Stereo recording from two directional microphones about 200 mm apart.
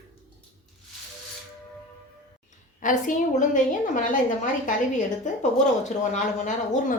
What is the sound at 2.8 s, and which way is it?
A woman's voice, 40° left (ahead or behind).